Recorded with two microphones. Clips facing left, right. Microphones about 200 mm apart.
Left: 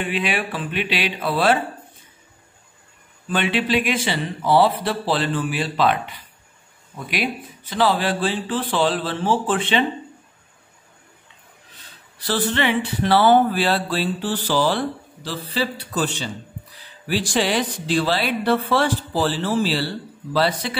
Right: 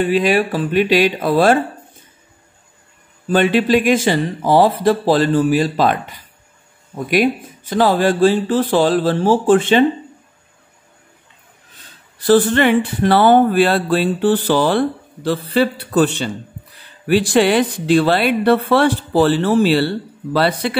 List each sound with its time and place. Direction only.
0.0 s speech: 40° right (ahead or behind)
3.3 s speech: 45° right (ahead or behind)
12.2 s speech: 50° right (ahead or behind)